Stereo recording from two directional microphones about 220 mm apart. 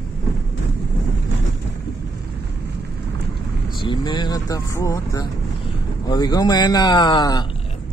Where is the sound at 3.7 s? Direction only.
20° left (ahead or behind).